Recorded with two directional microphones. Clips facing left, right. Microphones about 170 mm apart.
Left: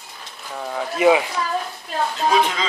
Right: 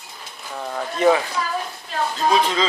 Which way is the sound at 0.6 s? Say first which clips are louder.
Left 1 dB; 5° left (ahead or behind).